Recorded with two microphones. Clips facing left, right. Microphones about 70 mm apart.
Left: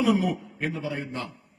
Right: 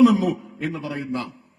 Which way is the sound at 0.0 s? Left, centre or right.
Right.